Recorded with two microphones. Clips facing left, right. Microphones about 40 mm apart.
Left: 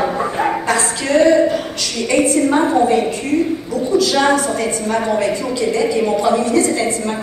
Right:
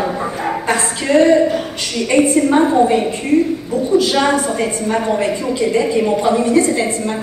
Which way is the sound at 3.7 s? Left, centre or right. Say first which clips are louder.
Right 2 dB; right.